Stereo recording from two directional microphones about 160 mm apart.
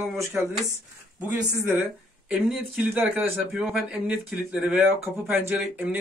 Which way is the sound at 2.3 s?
5° right (ahead or behind).